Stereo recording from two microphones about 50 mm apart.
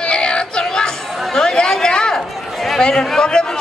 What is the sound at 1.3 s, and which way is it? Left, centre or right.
Chatter, centre.